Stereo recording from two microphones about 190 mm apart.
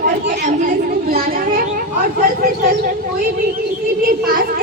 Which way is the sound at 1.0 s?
50° right (ahead or behind).